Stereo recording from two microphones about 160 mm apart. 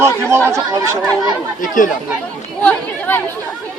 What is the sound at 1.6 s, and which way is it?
Speech, 55° left (ahead or behind).